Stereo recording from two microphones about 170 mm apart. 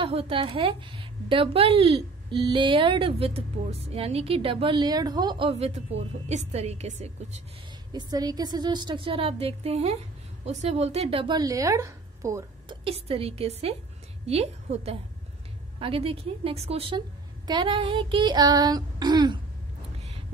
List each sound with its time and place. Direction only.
0.0 s a woman's voice: 35° right (ahead or behind)
7.9 s a woman's voice: 25° right (ahead or behind)
12.8 s a woman's voice: 35° right (ahead or behind)